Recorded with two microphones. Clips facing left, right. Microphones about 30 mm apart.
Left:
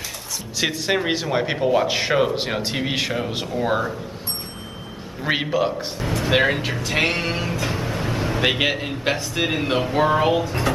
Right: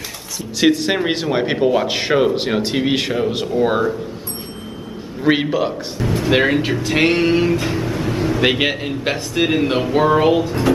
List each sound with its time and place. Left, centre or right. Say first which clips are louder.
0.6 s a man's voice: right 6 dB; centre
5.2 s a man's voice: right 4 dB; centre
7.6 s vehicle: right 4 dB; centre
8.4 s a man's voice: right 1 dB; centre